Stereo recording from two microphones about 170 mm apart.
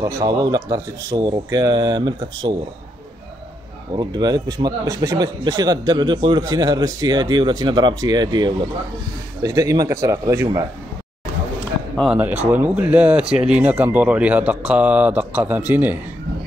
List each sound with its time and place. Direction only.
0.0 s speech: 25° right (ahead or behind)
3.9 s speech: 25° right (ahead or behind)
12.0 s a man's voice: 5° right (ahead or behind)